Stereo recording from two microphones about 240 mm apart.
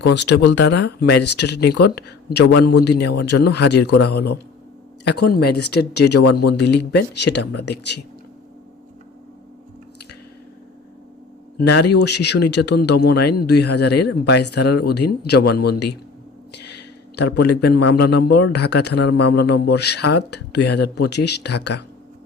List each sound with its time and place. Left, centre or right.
0.1 s speech: left
11.5 s speech: left
16.5 s a sound: left
18.1 s speech: left